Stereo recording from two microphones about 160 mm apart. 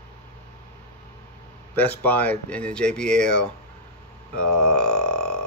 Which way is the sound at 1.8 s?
10° left (ahead or behind).